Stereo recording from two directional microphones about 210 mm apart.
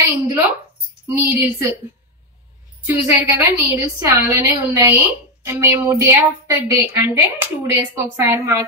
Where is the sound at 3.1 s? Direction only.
15° right (ahead or behind).